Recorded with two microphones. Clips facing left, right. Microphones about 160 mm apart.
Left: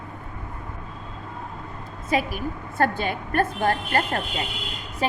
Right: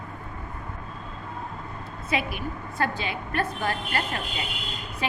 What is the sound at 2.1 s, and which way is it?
A woman's voice, 45° left (ahead or behind).